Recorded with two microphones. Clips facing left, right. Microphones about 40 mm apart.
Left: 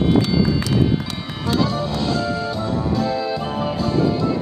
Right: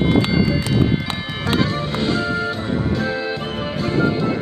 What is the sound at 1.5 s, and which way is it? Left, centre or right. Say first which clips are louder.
Music: even; right.